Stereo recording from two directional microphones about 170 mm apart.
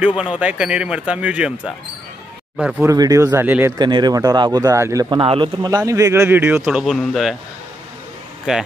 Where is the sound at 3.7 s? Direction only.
25° right (ahead or behind); by 7.4 s centre (ahead or behind).